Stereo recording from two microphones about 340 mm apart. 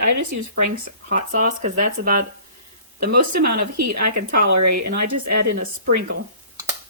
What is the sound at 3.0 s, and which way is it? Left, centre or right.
Speech, right.